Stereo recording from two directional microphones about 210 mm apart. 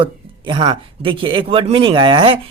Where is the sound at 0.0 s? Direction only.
25° right (ahead or behind).